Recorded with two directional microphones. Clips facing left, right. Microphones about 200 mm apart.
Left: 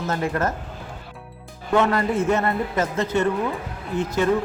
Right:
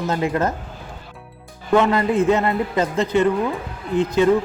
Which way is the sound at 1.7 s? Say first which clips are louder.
Right 3 dB; 15° right (ahead or behind).